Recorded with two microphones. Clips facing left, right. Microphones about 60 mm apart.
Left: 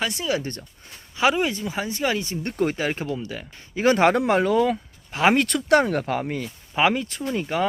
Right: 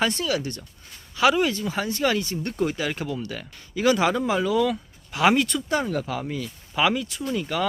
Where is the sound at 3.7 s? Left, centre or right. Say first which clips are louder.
Left 3 dB; left.